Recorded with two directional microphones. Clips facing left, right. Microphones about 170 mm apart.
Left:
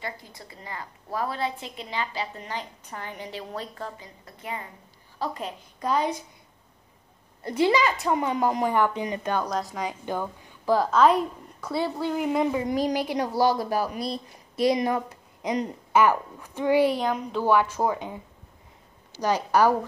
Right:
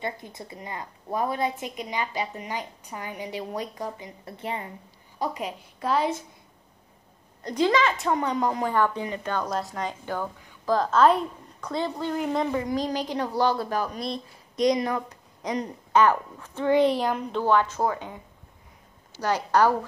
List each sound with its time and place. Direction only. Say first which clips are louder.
0.0 s a woman's voice: right 4 dB; 25° right (ahead or behind)
4.2 s a woman's voice: right 3 dB; 25° right (ahead or behind)
5.2 s a woman's voice: right 1 dB; 10° right (ahead or behind)
7.4 s a woman's voice: even; 10° left (ahead or behind)
9.4 s a woman's voice: even; centre (ahead or behind)
10.0 s a woman's voice: left 1 dB; 15° left (ahead or behind)
10.9 s a woman's voice: right 2 dB; centre (ahead or behind)
14.8 s a woman's voice: left 2 dB; 20° left (ahead or behind)
15.9 s a woman's voice: right 1 dB; 10° left (ahead or behind)
17.4 s a woman's voice: left 1 dB; 10° left (ahead or behind)
19.2 s a woman's voice: left 1 dB; 10° left (ahead or behind)